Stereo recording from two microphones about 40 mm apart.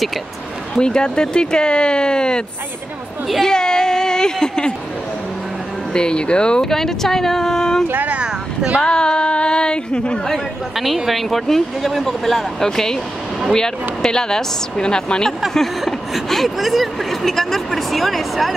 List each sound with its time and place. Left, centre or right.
0.7 s speech: centre
3.4 s speech: centre
5.9 s speech: left
6.6 s speech: centre
8.8 s speech: left
11.1 s speech: centre
15.8 s speech: centre